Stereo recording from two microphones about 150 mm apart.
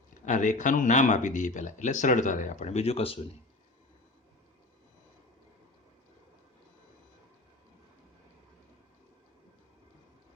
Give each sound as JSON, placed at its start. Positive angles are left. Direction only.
{"t": 0.1, "sound": "speech", "side_deg": 55}